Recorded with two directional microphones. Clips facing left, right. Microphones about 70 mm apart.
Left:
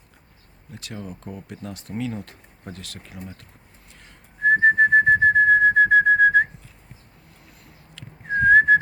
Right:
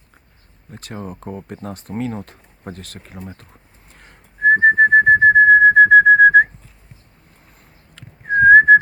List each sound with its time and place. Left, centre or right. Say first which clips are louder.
0.7 s speech: right 4 dB; right
3.9 s whistling: right 5 dB; right
7.9 s whistling: right 7 dB; right